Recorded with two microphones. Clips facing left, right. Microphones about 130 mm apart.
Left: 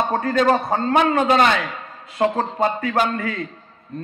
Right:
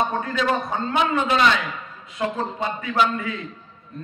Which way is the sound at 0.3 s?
45° left (ahead or behind).